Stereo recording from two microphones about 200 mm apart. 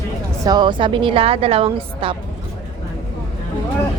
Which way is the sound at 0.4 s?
20° right (ahead or behind).